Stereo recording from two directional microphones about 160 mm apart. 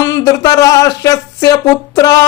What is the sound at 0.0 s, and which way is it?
Speech, 20° left (ahead or behind).